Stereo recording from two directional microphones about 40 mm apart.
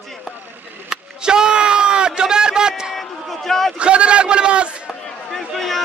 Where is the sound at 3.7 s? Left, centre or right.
Right.